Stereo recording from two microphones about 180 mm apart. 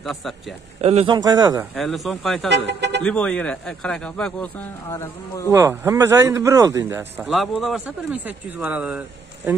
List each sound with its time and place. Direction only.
0.0 s speech: centre (ahead or behind)
0.7 s speech: 35° right (ahead or behind); by 1.7 s 20° right (ahead or behind)
1.8 s speech: centre (ahead or behind)
2.5 s speech: 70° right (ahead or behind)
3.0 s speech: 5° left (ahead or behind)
5.5 s speech: 15° right (ahead or behind)
7.2 s speech: centre (ahead or behind)